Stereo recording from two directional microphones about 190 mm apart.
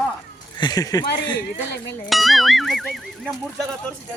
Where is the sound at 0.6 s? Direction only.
20° left (ahead or behind).